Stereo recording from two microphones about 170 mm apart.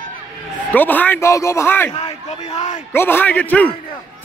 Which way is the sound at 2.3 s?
40° left (ahead or behind).